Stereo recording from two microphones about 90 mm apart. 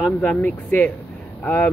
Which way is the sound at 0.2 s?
15° left (ahead or behind).